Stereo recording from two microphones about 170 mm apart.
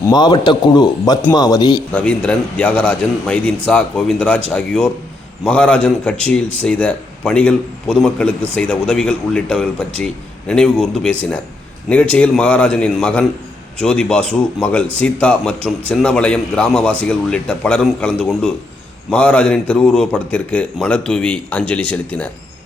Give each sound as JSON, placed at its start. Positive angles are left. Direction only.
{"t": 0.0, "sound": "a man's voice", "side_deg": 25}
{"t": 1.9, "sound": "a man's voice", "side_deg": 5}
{"t": 12.1, "sound": "a man's voice", "side_deg": 5}